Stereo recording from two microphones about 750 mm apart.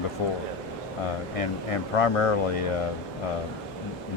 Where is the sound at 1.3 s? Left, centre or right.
Left.